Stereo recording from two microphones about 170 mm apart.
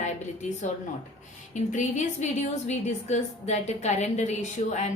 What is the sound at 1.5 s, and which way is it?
A woman's voice, 45° left (ahead or behind).